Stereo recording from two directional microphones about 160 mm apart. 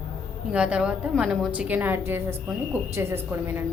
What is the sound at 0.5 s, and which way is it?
A woman's voice, 5° right (ahead or behind).